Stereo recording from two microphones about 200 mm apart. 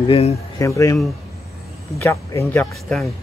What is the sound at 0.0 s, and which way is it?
Speech, 30° left (ahead or behind).